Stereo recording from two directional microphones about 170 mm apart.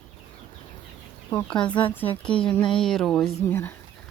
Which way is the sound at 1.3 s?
5° left (ahead or behind).